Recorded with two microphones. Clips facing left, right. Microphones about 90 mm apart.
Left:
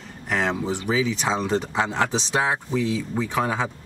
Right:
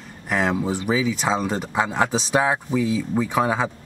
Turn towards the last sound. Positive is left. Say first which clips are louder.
# right 3 dB
turn(degrees=-15)  # may be behind; listen again after turning